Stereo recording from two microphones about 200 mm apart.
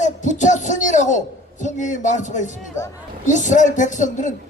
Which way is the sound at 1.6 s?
40° left (ahead or behind).